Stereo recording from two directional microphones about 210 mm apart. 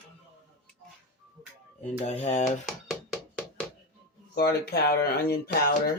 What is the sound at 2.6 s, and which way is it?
Music, centre (ahead or behind).